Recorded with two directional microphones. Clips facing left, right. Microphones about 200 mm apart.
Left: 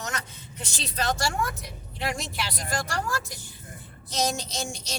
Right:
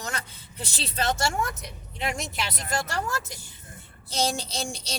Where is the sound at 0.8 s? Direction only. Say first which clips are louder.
Right 1 dB; 30° right (ahead or behind).